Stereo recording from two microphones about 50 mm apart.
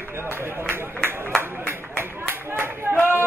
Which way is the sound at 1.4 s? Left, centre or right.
Right.